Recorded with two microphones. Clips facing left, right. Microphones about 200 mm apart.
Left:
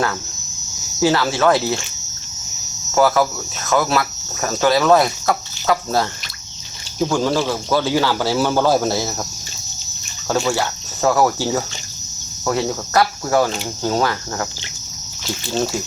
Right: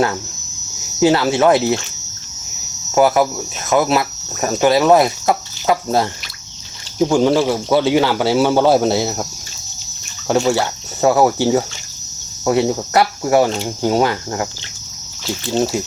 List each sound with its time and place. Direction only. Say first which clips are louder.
0.9 s a man's voice: right 4 dB; 20° right (ahead or behind)
2.9 s a man's voice: right 2 dB; 20° right (ahead or behind)
10.2 s a man's voice: right 4 dB; 25° right (ahead or behind)